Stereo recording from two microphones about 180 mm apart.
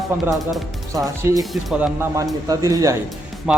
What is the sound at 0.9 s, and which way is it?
Speech, 20° right (ahead or behind).